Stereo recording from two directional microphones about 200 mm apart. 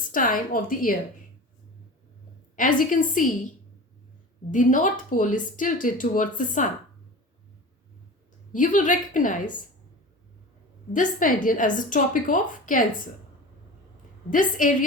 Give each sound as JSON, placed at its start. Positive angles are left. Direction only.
{"t": 0.1, "sound": "a woman's voice", "side_deg": 45}
{"t": 2.6, "sound": "speech", "side_deg": 40}
{"t": 4.5, "sound": "speech", "side_deg": 40}
{"t": 8.5, "sound": "speech", "side_deg": 40}
{"t": 10.9, "sound": "speech", "side_deg": 40}
{"t": 14.3, "sound": "speech", "side_deg": 40}